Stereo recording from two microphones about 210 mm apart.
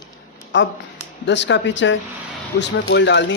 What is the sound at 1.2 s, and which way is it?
Speech, 55° left (ahead or behind).